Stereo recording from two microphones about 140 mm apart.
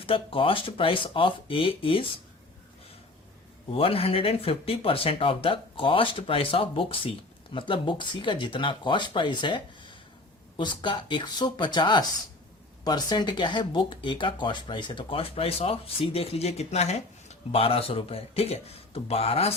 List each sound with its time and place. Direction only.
0.0 s speech: 40° left (ahead or behind)
3.7 s speech: 40° left (ahead or behind)